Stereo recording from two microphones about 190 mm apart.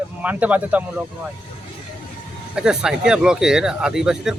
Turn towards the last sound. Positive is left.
turn(degrees=-5)  # may be behind; listen again after turning